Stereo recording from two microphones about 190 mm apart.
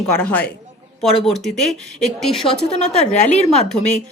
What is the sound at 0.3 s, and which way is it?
A woman's voice, 10° left (ahead or behind).